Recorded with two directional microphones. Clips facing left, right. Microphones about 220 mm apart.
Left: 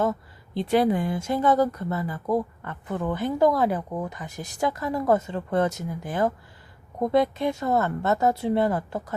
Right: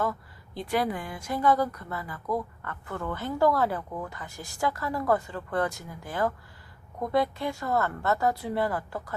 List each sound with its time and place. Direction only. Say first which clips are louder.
0.0 s speech: left 5 dB; 25° left (ahead or behind)